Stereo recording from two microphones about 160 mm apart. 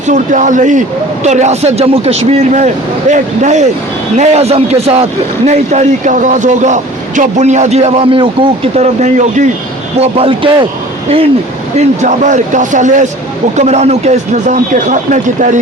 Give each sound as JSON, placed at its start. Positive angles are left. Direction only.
{"t": 0.1, "sound": "a man's voice", "side_deg": -50}
{"t": 10.0, "sound": "a man's voice", "side_deg": -35}
{"t": 11.8, "sound": "speech", "side_deg": -50}